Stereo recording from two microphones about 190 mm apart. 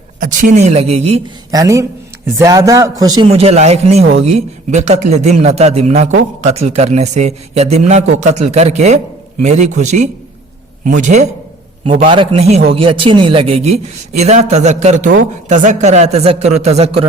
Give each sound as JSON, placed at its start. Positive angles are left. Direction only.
{"t": 0.2, "sound": "a man's voice", "side_deg": -40}
{"t": 1.5, "sound": "a man's voice", "side_deg": -15}
{"t": 3.2, "sound": "a man's voice", "side_deg": -30}